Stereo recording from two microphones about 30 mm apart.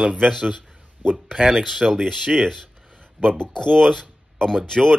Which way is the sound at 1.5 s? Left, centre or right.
Centre.